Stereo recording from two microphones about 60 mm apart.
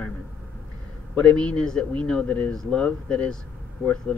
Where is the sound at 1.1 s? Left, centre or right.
Centre.